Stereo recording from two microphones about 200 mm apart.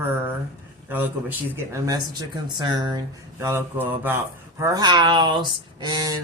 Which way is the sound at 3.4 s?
10° right (ahead or behind).